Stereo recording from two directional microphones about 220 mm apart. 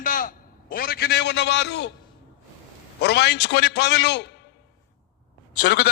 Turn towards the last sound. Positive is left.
turn(degrees=55)  # may be behind; listen again after turning